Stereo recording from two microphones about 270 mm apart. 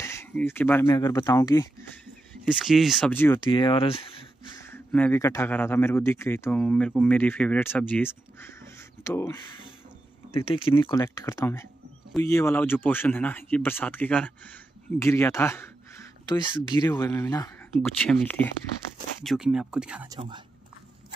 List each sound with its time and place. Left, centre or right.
0.0 s speech: centre
2.4 s speech: centre; by 4.0 s left
4.6 s speech: centre
17.8 s speech: centre
20.2 s speech: centre